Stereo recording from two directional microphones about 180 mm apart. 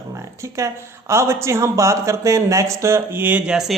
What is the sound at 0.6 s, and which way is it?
Speech, 15° right (ahead or behind).